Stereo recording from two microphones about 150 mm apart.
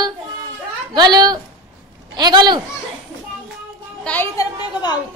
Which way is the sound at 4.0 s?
10° left (ahead or behind).